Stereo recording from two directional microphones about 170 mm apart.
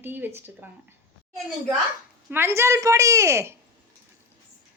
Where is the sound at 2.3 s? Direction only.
15° right (ahead or behind).